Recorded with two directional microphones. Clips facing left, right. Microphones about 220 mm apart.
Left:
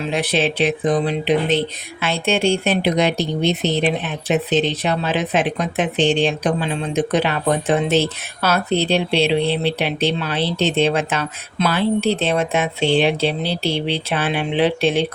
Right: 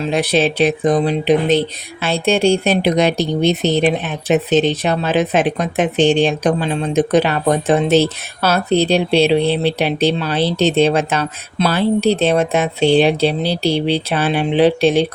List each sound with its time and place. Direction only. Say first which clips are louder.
0.1 s speech: right 4 dB; 40° right (ahead or behind)